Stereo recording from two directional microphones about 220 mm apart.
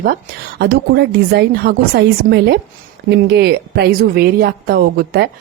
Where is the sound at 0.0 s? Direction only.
45° right (ahead or behind).